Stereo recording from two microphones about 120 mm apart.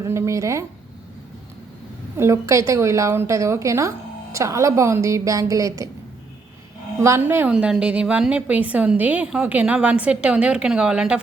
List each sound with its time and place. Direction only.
0.0 s a woman's voice: 25° right (ahead or behind)
2.1 s a woman's voice: 25° right (ahead or behind)
7.0 s a woman's voice: 20° right (ahead or behind)
7.5 s a woman's voice: 5° right (ahead or behind)